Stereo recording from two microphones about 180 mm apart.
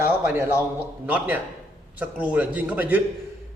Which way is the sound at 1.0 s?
10° right (ahead or behind).